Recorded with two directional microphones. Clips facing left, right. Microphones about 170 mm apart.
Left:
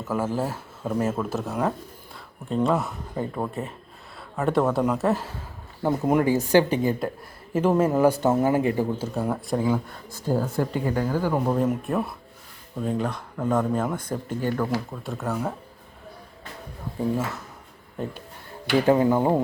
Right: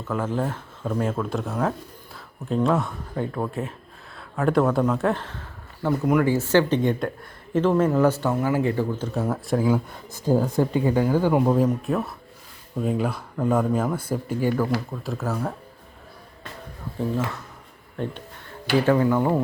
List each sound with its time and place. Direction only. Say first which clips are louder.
0.1 s speech: even; 5° left (ahead or behind)
8.4 s speech: left 2 dB; 30° left (ahead or behind)
8.6 s speech: even; 15° left (ahead or behind)
9.1 s speech: right 3 dB; centre (ahead or behind)
10.1 s speech: right 4 dB; 20° right (ahead or behind)
11.7 s speech: right 1 dB; centre (ahead or behind)
17.9 s speech: right 2 dB; 5° left (ahead or behind)
18.7 s speech: even; 20° left (ahead or behind)